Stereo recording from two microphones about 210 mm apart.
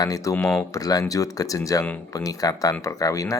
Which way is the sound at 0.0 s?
15° left (ahead or behind).